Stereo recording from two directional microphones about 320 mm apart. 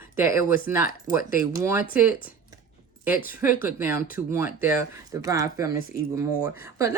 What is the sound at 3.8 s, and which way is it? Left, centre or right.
Speech, centre.